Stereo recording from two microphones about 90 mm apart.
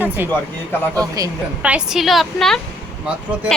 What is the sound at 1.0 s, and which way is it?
Speech, 40° right (ahead or behind).